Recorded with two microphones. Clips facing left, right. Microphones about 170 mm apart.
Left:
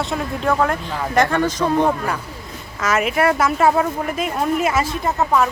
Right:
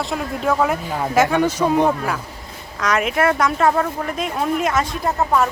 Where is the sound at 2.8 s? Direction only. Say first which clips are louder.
Even; 5° left (ahead or behind).